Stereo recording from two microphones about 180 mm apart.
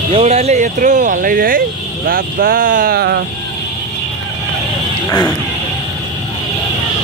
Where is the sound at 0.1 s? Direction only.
35° right (ahead or behind); by 3.2 s 60° right (ahead or behind).